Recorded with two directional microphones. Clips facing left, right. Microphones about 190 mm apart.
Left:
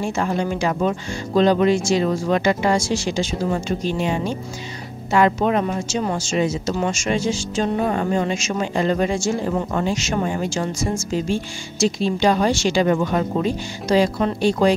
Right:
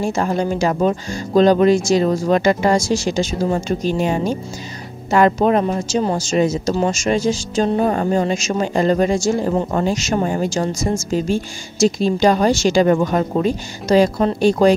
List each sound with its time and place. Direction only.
0.0 s speech: 40° right (ahead or behind)